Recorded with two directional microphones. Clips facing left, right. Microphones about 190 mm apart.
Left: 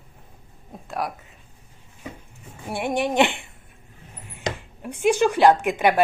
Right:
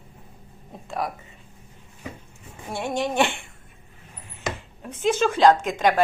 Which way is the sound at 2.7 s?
15° left (ahead or behind).